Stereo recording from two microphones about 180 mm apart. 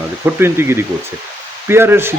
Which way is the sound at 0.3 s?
15° right (ahead or behind).